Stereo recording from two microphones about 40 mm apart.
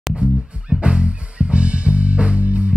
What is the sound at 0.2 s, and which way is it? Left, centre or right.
Music, right.